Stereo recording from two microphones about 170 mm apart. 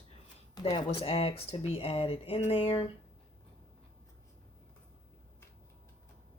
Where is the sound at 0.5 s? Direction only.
30° left (ahead or behind).